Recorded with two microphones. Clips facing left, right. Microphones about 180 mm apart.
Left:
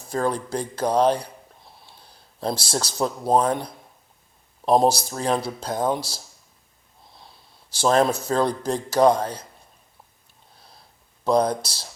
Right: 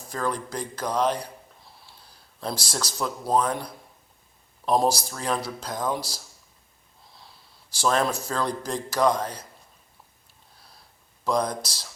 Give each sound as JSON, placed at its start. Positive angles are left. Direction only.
{"t": 0.1, "sound": "speech", "side_deg": 30}
{"t": 2.4, "sound": "speech", "side_deg": 25}
{"t": 7.8, "sound": "speech", "side_deg": 30}
{"t": 11.3, "sound": "speech", "side_deg": 30}